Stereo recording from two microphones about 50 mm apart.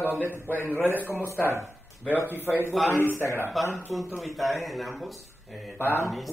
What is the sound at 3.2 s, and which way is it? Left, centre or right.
Speech, left.